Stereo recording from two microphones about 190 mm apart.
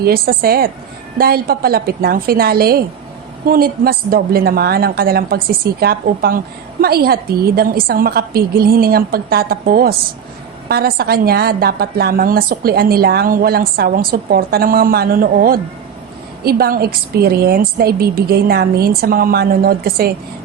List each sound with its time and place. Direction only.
0.0 s a woman's voice: 55° right (ahead or behind)